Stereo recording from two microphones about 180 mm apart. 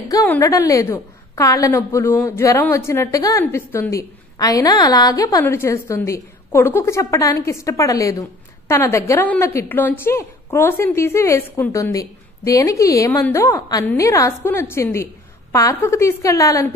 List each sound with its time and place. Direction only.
0.3 s a woman's voice: 15° left (ahead or behind)